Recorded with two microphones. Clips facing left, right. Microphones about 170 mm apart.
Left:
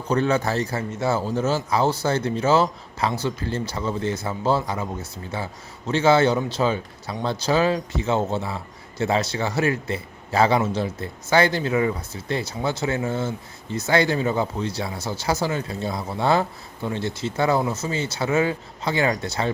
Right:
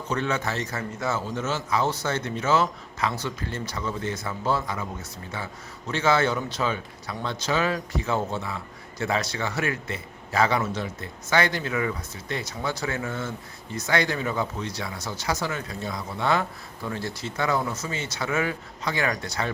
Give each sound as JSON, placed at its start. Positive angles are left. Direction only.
{"t": 0.1, "sound": "speech", "side_deg": 35}